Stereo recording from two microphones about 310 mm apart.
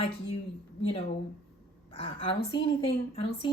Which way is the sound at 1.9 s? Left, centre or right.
Centre.